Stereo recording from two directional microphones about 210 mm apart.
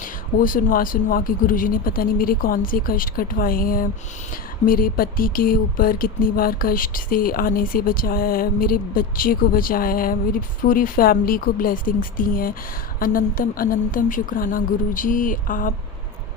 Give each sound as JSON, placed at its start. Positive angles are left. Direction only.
{"t": 0.0, "sound": "speech", "side_deg": 40}